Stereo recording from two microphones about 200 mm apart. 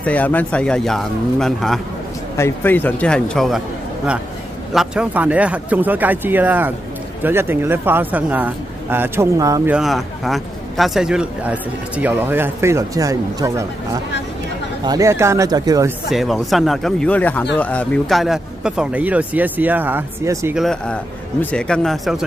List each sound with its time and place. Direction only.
0.0 s a man's voice: 5° left (ahead or behind)
2.3 s a man's voice: 10° left (ahead or behind); by 9.8 s 15° right (ahead or behind)
9.8 s speech: centre (ahead or behind); by 13.7 s 15° right (ahead or behind)
14.9 s speech: 15° right (ahead or behind)
16.1 s a man's voice: centre (ahead or behind)
20.6 s a man's voice: 5° left (ahead or behind)